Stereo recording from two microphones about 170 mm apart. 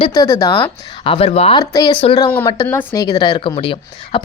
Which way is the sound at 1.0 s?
35° left (ahead or behind).